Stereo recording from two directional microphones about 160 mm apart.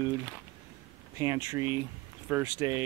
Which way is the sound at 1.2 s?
20° right (ahead or behind).